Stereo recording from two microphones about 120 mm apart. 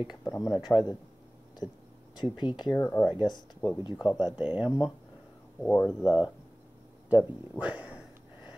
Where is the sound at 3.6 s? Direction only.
40° left (ahead or behind).